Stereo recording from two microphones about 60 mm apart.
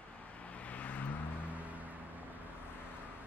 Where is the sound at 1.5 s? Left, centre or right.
Right.